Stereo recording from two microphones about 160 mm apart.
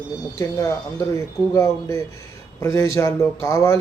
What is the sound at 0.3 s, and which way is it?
Speech, 20° left (ahead or behind).